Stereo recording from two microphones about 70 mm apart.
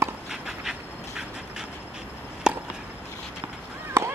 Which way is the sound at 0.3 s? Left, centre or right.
Centre.